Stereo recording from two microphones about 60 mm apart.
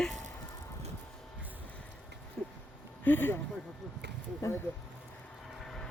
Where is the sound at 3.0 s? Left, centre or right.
Left.